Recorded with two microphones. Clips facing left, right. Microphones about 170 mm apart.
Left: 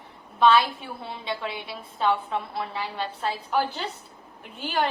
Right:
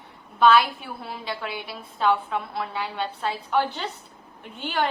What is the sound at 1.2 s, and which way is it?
Speech, 25° left (ahead or behind).